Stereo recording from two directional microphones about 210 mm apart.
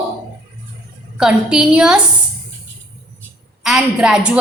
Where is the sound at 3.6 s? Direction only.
Centre (ahead or behind).